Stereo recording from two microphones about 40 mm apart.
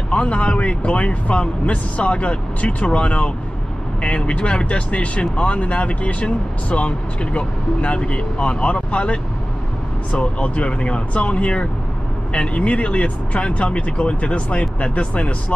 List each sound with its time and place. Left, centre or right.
0.1 s a man's voice: left